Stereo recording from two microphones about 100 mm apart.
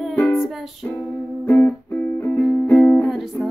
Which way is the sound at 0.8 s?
15° left (ahead or behind).